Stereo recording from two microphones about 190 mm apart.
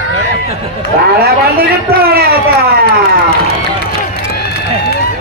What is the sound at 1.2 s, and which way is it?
A man's voice, 55° right (ahead or behind).